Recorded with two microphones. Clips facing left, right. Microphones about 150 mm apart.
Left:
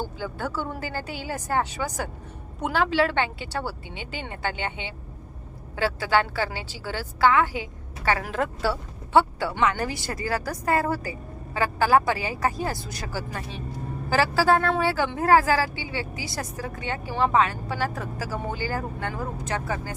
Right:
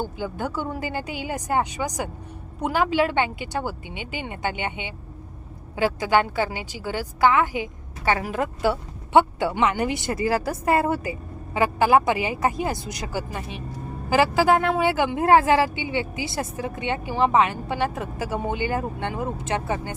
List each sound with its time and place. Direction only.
0.0 s a woman's voice: 15° right (ahead or behind)
8.6 s speech: 20° right (ahead or behind)